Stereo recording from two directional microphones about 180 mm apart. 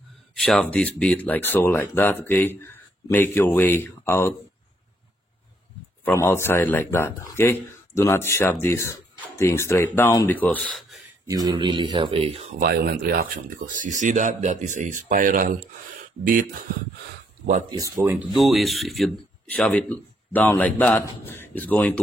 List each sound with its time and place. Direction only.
0.4 s speech: 5° left (ahead or behind)
6.0 s speech: 15° left (ahead or behind)
11.2 s speech: 20° right (ahead or behind)
12.5 s speech: 55° right (ahead or behind)
17.6 s speech: 20° right (ahead or behind)
18.3 s speech: centre (ahead or behind)